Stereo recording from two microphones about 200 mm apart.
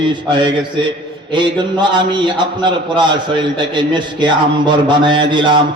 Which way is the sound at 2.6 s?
25° right (ahead or behind).